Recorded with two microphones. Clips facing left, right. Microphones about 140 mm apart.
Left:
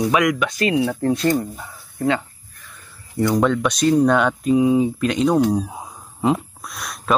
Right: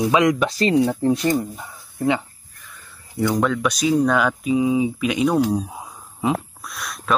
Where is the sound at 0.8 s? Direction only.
15° right (ahead or behind).